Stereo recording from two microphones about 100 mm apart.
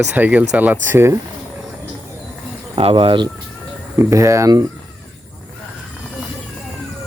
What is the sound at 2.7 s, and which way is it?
Speech, 65° right (ahead or behind).